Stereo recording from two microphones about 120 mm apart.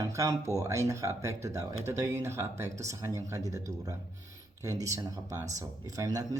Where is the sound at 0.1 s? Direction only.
25° right (ahead or behind).